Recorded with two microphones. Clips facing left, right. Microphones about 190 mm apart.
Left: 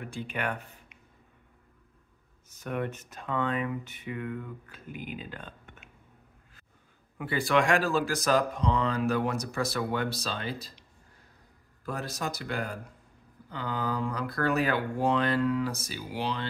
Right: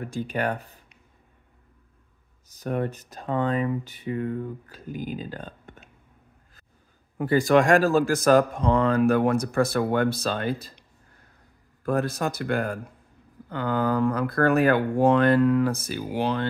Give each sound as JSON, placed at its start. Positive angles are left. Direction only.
{"t": 0.0, "sound": "speech", "side_deg": -40}
{"t": 2.4, "sound": "speech", "side_deg": -35}
{"t": 7.2, "sound": "speech", "side_deg": -40}